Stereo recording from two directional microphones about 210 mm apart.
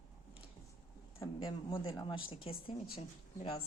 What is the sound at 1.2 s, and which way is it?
Speech, 20° left (ahead or behind).